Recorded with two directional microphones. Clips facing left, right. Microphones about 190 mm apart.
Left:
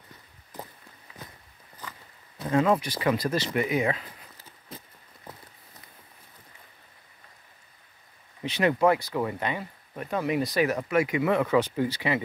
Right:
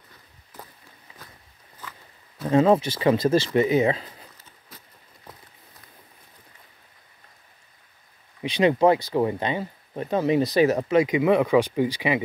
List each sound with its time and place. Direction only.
2.5 s speech: 25° right (ahead or behind)
8.4 s speech: 15° right (ahead or behind)